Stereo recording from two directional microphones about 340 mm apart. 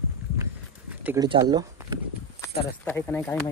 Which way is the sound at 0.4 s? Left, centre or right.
Centre.